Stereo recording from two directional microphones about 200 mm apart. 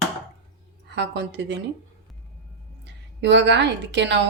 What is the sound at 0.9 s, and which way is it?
Speech, 60° right (ahead or behind).